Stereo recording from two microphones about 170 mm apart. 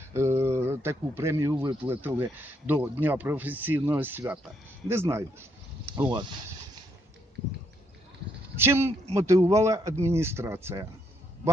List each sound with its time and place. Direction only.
0.1 s speech: 15° right (ahead or behind)
5.9 s speech: 25° right (ahead or behind)
8.5 s speech: 15° right (ahead or behind)